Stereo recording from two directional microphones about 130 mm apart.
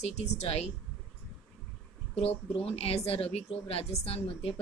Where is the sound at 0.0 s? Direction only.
55° left (ahead or behind).